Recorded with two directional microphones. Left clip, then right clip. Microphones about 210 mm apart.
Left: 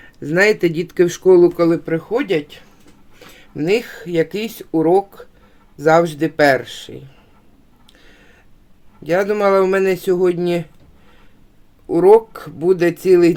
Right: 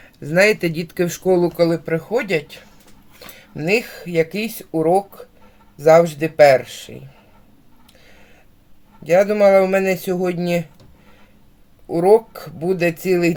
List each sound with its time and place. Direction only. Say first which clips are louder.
0.2 s speech: left 1 dB; 30° left (ahead or behind)
3.5 s speech: left 1 dB; 30° left (ahead or behind)
9.0 s speech: right 2 dB; 35° left (ahead or behind)
11.9 s speech: left 3 dB; 35° left (ahead or behind)